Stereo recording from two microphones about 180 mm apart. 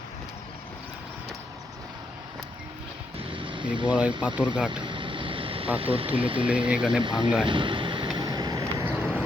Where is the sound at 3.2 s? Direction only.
30° right (ahead or behind).